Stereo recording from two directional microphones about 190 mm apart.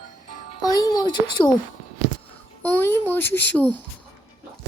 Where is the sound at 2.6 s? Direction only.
10° left (ahead or behind).